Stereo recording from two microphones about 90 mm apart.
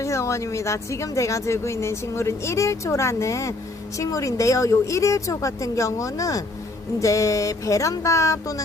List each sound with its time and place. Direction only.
0.0 s speech: 35° left (ahead or behind)